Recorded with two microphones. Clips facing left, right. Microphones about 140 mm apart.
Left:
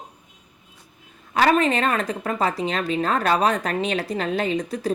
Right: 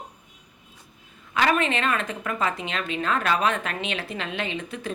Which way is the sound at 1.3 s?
35° left (ahead or behind).